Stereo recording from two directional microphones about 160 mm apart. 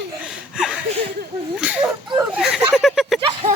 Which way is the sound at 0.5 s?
5° right (ahead or behind).